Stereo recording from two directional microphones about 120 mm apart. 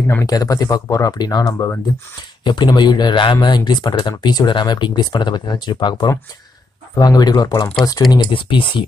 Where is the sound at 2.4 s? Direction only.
35° left (ahead or behind).